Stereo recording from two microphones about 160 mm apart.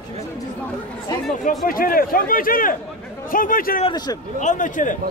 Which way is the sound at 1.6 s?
65° left (ahead or behind).